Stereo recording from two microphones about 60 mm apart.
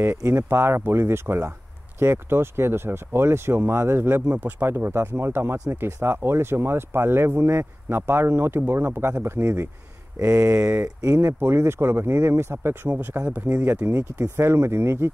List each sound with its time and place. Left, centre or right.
0.0 s speech: right
4.3 s speech: right
4.6 s speech: right
10.1 s speech: right
11.1 s speech: right
13.2 s speech: right
14.3 s speech: right